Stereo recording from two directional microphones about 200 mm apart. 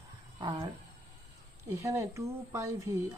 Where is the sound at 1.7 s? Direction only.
15° right (ahead or behind).